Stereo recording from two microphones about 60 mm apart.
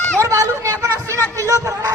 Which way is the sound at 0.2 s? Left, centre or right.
Right.